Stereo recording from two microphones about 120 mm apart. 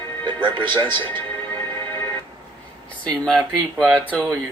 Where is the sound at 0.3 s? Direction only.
40° right (ahead or behind).